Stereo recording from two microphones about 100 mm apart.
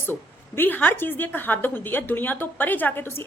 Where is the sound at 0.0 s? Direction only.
20° left (ahead or behind).